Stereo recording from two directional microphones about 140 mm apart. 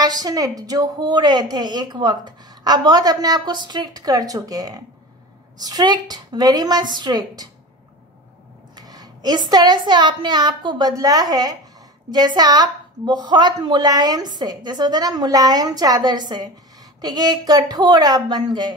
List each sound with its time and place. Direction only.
0.0 s a woman's voice: 30° right (ahead or behind)
8.7 s a woman's voice: 25° right (ahead or behind)